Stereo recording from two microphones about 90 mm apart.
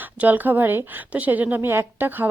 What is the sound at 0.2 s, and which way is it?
A woman's voice, 20° right (ahead or behind).